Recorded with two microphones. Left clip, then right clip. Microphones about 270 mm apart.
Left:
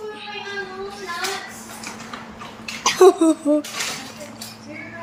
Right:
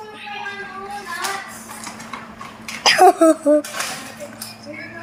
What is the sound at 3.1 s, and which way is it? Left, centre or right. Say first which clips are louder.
Speech: right 2 dB; right.